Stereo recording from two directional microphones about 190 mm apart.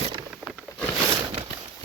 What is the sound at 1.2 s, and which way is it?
Horse, 25° right (ahead or behind).